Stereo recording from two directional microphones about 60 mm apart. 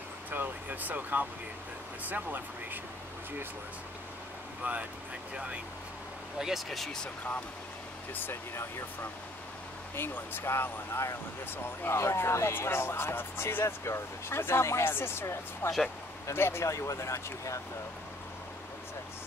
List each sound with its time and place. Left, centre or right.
0.3 s a sound: right
2.0 s speech: right
4.6 s speech: right
6.4 s speech: centre
8.1 s speech: left
9.9 s speech: left
16.6 s speech: left